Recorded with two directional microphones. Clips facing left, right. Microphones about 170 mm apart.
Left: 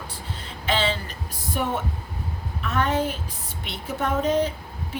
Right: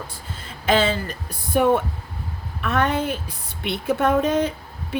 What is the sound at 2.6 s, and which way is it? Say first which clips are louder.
A woman's voice: right 2 dB; 60° right (ahead or behind).